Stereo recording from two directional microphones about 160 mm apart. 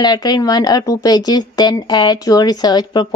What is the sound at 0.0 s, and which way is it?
Speech, 25° left (ahead or behind).